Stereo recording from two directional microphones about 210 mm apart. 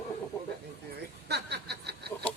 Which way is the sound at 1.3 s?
50° right (ahead or behind).